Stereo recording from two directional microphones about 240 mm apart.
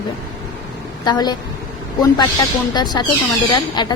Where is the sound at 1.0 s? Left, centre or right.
Centre.